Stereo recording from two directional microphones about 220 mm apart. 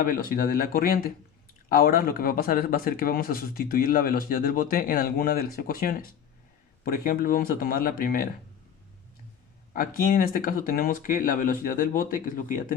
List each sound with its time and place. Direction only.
0.0 s speech: 40° left (ahead or behind)
9.7 s speech: 40° left (ahead or behind)